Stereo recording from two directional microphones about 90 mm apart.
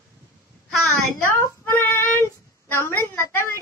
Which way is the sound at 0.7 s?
Centre (ahead or behind).